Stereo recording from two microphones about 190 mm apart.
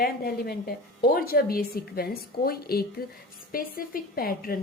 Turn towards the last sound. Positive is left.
turn(degrees=50)  # may be behind; listen again after turning